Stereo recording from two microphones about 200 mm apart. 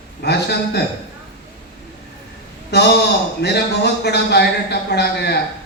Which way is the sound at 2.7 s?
55° left (ahead or behind).